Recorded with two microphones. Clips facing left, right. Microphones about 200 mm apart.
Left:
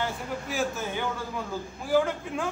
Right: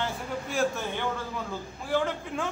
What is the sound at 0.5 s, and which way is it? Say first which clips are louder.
A man's voice: right 2 dB; centre (ahead or behind).